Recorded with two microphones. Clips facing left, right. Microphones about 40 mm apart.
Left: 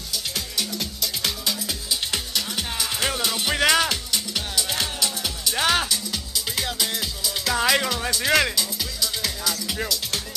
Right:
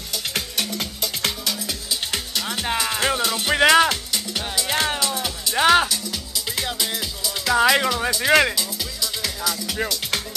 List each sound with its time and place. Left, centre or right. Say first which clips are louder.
0.1 s music: right 3 dB; right
1.5 s music: even; centre
2.4 s music: right 5 dB; right
3.4 s music: right 5 dB; centre
4.6 s music: right 4 dB; right
5.6 s music: right 6 dB; centre
9.8 s music: right 3 dB; centre